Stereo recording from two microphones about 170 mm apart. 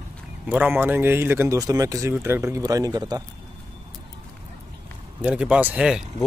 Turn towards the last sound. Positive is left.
turn(degrees=-5)  # may be behind; listen again after turning